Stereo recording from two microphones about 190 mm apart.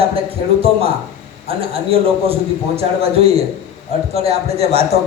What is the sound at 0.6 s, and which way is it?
A man's voice, 30° right (ahead or behind).